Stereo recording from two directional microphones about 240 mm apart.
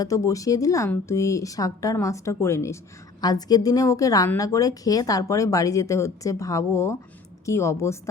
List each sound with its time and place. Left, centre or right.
0.0 s a woman's voice: centre